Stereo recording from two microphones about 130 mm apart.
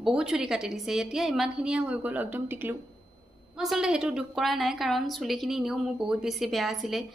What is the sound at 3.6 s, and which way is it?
A woman's voice, 5° right (ahead or behind).